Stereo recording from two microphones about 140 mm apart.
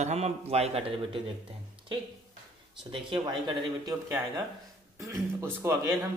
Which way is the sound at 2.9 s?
40° right (ahead or behind).